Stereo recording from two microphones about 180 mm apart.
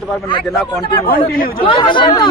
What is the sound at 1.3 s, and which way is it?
Speech, 55° left (ahead or behind).